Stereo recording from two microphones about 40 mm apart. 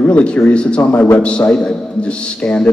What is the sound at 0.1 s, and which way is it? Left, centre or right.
Speech, left.